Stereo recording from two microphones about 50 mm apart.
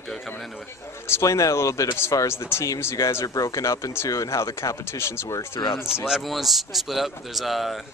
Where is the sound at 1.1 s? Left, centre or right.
Left.